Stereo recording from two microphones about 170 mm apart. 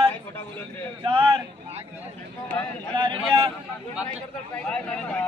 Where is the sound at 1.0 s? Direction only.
30° right (ahead or behind).